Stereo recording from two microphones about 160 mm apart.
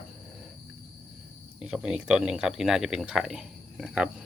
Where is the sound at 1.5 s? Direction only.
5° right (ahead or behind).